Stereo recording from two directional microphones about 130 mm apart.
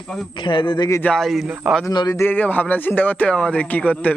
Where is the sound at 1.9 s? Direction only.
35° left (ahead or behind).